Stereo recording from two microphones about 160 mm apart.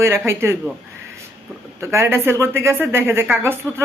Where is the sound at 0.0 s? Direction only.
15° right (ahead or behind).